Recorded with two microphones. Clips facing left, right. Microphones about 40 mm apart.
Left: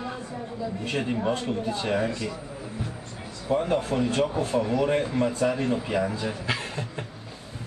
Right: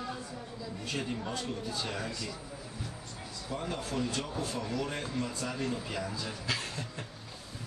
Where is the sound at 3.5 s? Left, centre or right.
Left.